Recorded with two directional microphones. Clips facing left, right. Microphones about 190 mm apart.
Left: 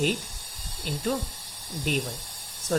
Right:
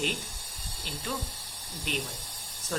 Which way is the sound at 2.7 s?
45° left (ahead or behind).